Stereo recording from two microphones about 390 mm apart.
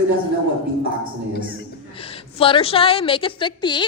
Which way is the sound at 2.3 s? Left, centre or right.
Centre.